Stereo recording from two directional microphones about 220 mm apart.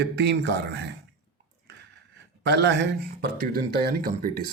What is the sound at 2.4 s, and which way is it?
A man's voice, 50° right (ahead or behind).